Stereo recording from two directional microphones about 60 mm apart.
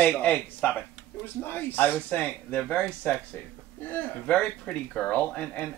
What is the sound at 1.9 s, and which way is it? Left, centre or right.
Speech, left.